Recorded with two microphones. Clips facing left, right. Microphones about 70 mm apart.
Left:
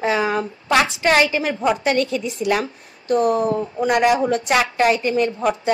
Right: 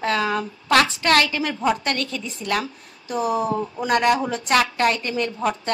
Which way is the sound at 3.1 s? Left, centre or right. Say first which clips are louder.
Left 5 dB; centre.